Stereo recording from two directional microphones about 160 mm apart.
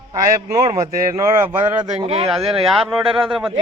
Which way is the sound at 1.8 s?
35° right (ahead or behind).